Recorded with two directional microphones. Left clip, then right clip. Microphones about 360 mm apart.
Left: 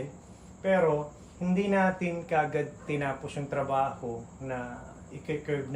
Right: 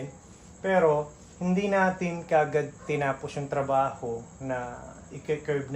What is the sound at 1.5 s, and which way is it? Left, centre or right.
Speech, centre.